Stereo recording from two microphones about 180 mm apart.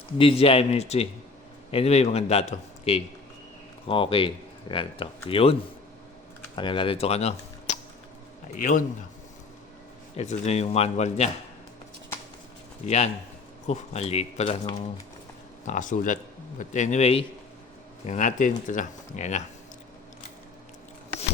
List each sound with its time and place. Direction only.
0.2 s speech: 30° left (ahead or behind)
6.6 s speech: 25° left (ahead or behind)
8.5 s speech: 45° left (ahead or behind)
10.2 s speech: 35° left (ahead or behind)
12.8 s speech: 40° left (ahead or behind)
15.6 s speech: 45° left (ahead or behind)